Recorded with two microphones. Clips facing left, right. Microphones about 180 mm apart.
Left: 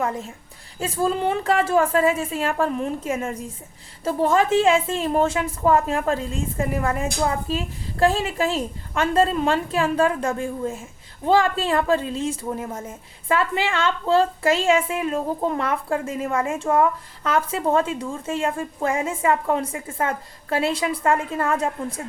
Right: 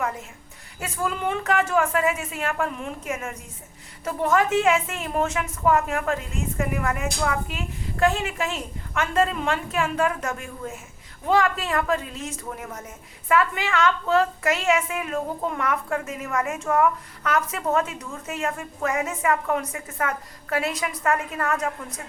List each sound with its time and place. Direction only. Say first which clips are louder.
0.0 s a woman's voice: left 3 dB; 30° left (ahead or behind)